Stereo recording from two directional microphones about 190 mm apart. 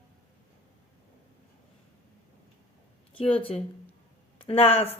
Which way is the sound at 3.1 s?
30° left (ahead or behind).